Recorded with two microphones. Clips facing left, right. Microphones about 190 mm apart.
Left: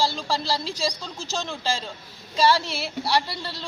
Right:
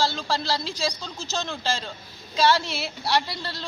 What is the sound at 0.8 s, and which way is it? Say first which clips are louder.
A woman's voice: left 1 dB; centre (ahead or behind).